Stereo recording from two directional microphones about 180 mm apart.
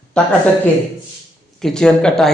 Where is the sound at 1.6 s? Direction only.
5° left (ahead or behind).